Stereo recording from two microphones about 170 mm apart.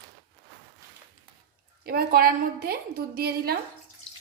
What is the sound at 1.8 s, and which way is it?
A woman's voice, 65° right (ahead or behind).